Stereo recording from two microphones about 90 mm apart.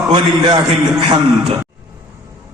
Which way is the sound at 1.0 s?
60° right (ahead or behind).